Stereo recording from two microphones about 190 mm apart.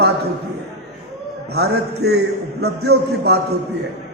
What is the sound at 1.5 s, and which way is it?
A man's voice, 60° right (ahead or behind).